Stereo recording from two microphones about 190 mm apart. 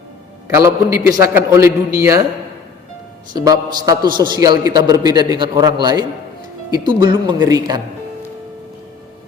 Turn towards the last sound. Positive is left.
turn(degrees=-20)  # may be behind; listen again after turning